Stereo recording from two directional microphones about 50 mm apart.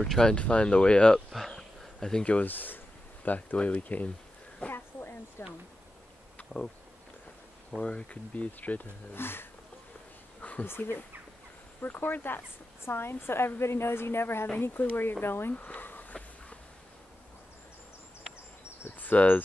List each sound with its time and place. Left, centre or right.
0.0 s speech: centre
0.3 s speech: left
1.3 s a sound: centre
2.4 s speech: left
4.6 s a sound: left
5.4 s speech: left
6.3 s bee: left
7.8 s speech: left
9.1 s a woman's voice: left
10.6 s a woman's voice: left
15.5 s a sound: left
16.1 s a sound: left
18.9 s cricket: left
19.1 s speech: left